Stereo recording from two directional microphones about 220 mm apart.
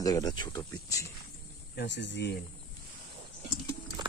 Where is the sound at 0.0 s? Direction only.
15° left (ahead or behind).